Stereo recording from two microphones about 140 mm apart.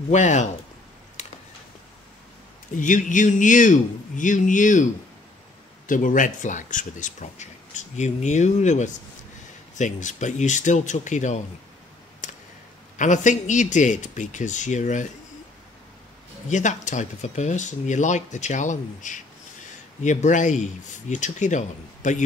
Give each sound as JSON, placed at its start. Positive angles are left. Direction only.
{"t": 0.1, "sound": "speech", "side_deg": 55}
{"t": 1.2, "sound": "a sound", "side_deg": 60}
{"t": 2.8, "sound": "speech", "side_deg": 65}
{"t": 5.9, "sound": "speech", "side_deg": 70}
{"t": 12.2, "sound": "a sound", "side_deg": 60}
{"t": 12.9, "sound": "speech", "side_deg": 60}
{"t": 16.4, "sound": "speech", "side_deg": 60}